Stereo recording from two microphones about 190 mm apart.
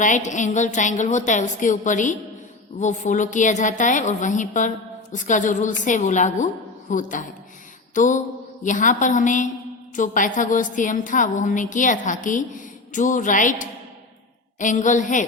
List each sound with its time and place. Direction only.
0.0 s a woman's voice: 40° left (ahead or behind)